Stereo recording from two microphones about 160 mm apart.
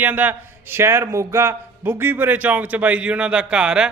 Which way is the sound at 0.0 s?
10° right (ahead or behind).